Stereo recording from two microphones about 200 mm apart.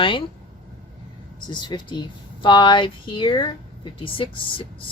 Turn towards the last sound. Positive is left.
turn(degrees=25)  # may be behind; listen again after turning